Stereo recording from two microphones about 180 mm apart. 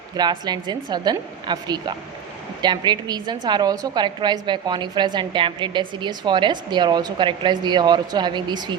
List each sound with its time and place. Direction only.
0.2 s a woman's voice: 25° right (ahead or behind)